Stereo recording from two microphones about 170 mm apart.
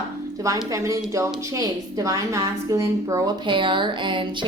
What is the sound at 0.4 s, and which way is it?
A woman's voice, 20° right (ahead or behind).